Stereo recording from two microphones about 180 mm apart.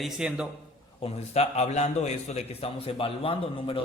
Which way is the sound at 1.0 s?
35° left (ahead or behind).